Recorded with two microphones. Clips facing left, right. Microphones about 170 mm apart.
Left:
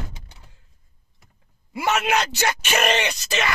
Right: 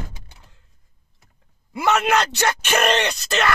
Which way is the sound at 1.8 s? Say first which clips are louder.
Right 3 dB; 55° right (ahead or behind).